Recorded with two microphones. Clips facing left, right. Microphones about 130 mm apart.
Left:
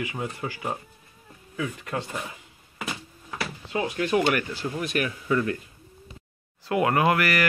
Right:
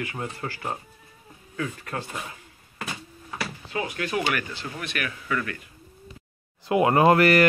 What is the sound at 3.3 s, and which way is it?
Speech, 25° left (ahead or behind).